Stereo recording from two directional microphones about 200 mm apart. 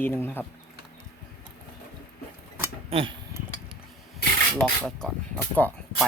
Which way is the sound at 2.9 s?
25° right (ahead or behind).